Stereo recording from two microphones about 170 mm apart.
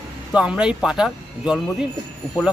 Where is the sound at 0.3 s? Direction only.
5° right (ahead or behind).